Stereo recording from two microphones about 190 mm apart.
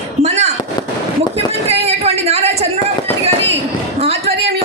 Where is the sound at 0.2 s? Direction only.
35° right (ahead or behind).